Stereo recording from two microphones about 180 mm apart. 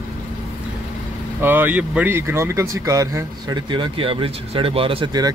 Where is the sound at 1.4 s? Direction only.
10° right (ahead or behind).